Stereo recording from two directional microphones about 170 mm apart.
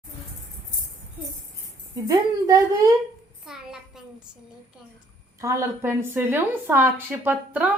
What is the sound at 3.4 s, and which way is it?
Child singing, centre (ahead or behind).